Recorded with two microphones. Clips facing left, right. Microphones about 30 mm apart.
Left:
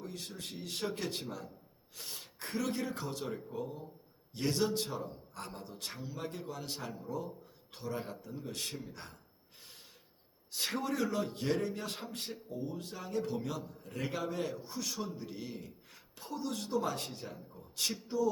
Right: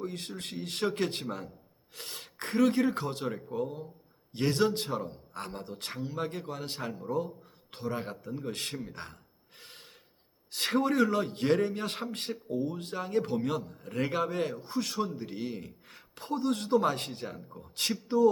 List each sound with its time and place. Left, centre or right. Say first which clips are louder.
0.0 s a man's voice: right 6 dB; right
9.6 s snort: right 5 dB; right
10.7 s a man's voice: right 9 dB; right